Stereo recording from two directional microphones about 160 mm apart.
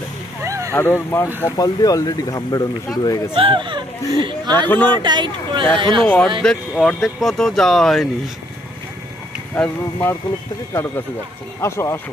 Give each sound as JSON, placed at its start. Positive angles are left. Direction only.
{"t": 0.4, "sound": "a sound", "side_deg": -20}
{"t": 0.7, "sound": "speech", "side_deg": 15}
{"t": 3.3, "sound": "speech", "side_deg": -30}
{"t": 4.6, "sound": "speech", "side_deg": 10}
{"t": 4.9, "sound": "speech", "side_deg": -25}
{"t": 6.0, "sound": "speech", "side_deg": 10}
{"t": 9.6, "sound": "speech", "side_deg": 5}